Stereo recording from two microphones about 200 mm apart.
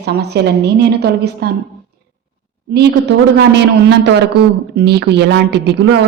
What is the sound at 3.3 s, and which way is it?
A woman's voice, 55° right (ahead or behind).